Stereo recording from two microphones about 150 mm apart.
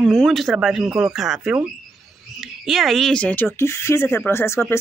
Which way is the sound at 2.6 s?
Centre (ahead or behind).